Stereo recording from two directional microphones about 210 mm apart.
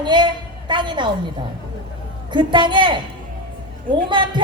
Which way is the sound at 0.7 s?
20° right (ahead or behind).